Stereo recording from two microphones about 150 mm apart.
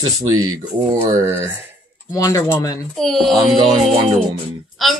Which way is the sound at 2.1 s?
20° left (ahead or behind).